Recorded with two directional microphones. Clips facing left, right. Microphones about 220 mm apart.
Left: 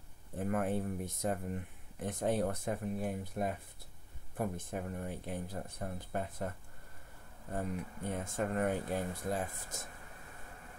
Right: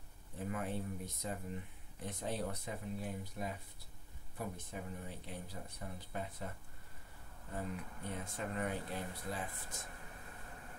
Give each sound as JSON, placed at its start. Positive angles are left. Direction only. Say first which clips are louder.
{"t": 0.4, "sound": "speech", "louder": "left 7 dB", "side_deg": 55}
{"t": 8.1, "sound": "speech", "louder": "left 7 dB", "side_deg": 50}